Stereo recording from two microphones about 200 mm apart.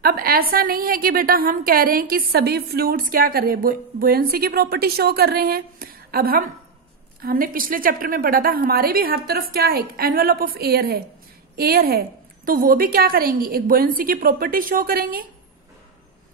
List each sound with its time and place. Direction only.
0.0 s a woman's voice: 50° right (ahead or behind)